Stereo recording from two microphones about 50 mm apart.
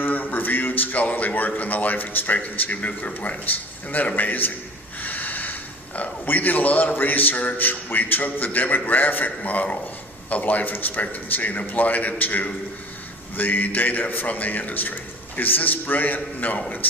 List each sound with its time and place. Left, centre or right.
0.0 s a sound: left
1.1 s a man's voice: left
4.9 s snort: left
6.2 s a man's voice: left